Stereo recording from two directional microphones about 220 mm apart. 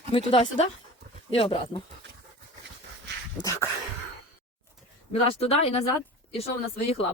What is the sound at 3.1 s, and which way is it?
Dog, 50° right (ahead or behind).